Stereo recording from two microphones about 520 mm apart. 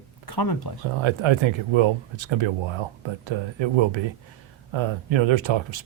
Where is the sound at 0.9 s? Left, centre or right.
Right.